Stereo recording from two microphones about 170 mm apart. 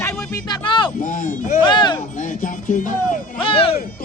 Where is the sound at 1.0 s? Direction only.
50° left (ahead or behind).